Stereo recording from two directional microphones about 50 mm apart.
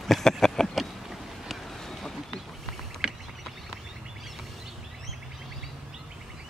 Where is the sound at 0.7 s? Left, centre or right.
Centre.